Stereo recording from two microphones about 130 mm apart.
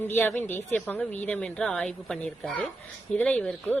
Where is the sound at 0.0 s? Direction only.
15° left (ahead or behind).